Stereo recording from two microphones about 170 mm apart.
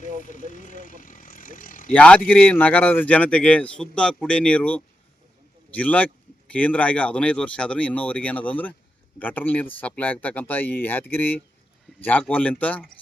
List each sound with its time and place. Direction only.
0.0 s vehicle: 50° left (ahead or behind)
1.9 s speech: 10° left (ahead or behind)